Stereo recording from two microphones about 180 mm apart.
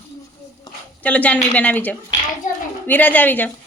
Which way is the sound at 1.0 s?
10° left (ahead or behind).